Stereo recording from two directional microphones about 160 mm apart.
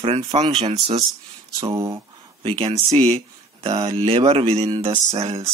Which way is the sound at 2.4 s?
35° right (ahead or behind).